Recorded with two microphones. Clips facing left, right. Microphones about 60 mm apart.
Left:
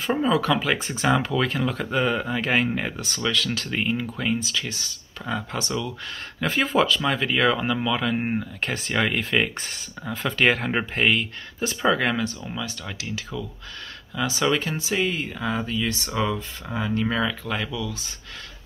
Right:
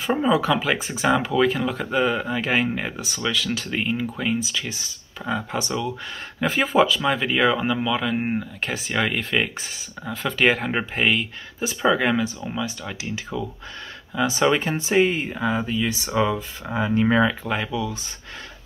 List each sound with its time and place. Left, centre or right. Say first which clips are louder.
0.0 s speech: right 2 dB; centre
4.4 s speech: right 1 dB; centre
5.2 s speech: right 3 dB; centre
5.6 s speech: right 2 dB; centre
6.4 s speech: right 2 dB; centre; by 15.4 s right
15.4 s speech: right 3 dB; centre